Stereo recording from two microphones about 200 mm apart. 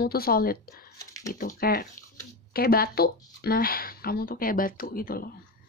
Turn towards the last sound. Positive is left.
turn(degrees=45)  # may be behind; listen again after turning